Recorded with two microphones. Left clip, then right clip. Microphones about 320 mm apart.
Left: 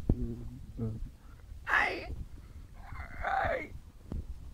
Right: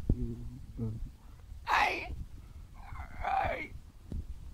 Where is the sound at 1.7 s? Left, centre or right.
Centre.